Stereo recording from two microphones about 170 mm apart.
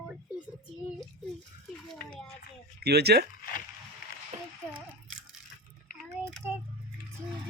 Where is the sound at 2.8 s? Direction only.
70° right (ahead or behind).